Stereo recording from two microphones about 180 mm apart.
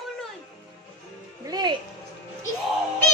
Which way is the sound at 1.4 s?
20° right (ahead or behind).